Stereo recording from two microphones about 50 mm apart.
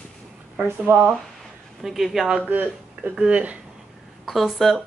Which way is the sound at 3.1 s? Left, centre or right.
Right.